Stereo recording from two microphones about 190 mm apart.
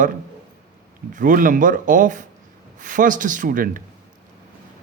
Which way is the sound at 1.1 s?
45° right (ahead or behind).